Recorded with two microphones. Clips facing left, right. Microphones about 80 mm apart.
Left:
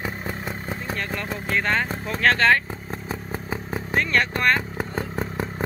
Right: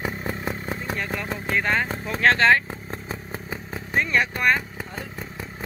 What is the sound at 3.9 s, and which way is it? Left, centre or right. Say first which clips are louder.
Speech: even; centre.